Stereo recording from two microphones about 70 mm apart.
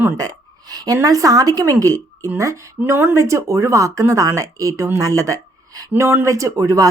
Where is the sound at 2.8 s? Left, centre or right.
Right.